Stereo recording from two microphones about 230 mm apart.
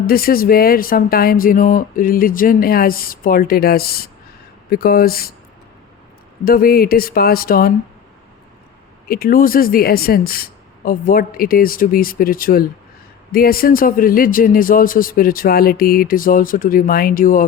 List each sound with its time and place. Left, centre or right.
0.1 s speech: left
6.4 s speech: left
9.0 s speech: left